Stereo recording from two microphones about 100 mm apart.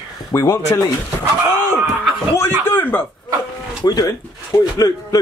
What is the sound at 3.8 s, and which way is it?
Speech, 45° left (ahead or behind).